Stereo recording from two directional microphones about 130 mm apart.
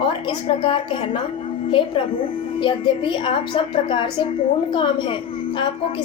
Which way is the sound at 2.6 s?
40° left (ahead or behind).